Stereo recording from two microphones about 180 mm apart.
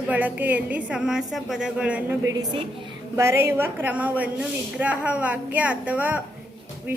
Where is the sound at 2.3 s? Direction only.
25° right (ahead or behind).